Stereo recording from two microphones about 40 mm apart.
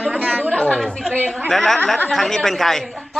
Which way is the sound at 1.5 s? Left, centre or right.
Centre.